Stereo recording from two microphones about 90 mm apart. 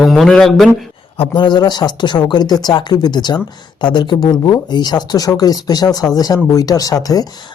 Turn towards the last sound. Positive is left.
turn(degrees=45)  # may be behind; listen again after turning